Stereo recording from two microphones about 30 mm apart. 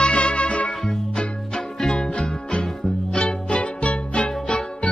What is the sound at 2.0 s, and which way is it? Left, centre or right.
Music, left.